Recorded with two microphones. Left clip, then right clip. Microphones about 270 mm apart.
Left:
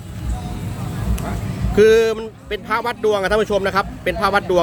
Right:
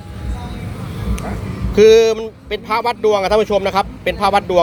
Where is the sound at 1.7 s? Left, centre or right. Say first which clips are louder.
Right 4 dB; centre.